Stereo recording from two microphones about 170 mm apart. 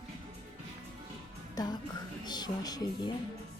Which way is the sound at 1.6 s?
20° left (ahead or behind).